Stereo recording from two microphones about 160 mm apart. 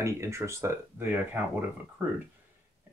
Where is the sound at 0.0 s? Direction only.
15° right (ahead or behind).